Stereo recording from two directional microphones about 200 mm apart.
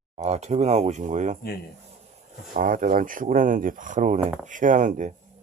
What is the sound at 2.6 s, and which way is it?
Speech, 40° right (ahead or behind).